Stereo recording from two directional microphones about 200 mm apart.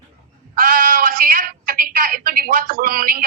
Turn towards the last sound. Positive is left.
turn(degrees=-45)  # may be behind; listen again after turning